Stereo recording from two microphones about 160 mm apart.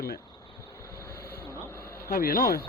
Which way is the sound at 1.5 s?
15° left (ahead or behind).